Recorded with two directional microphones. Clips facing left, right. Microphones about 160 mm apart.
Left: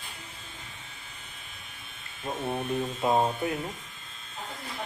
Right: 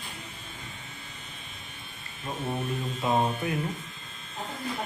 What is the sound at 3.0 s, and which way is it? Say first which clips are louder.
Mantra: left 1 dB; 30° left (ahead or behind).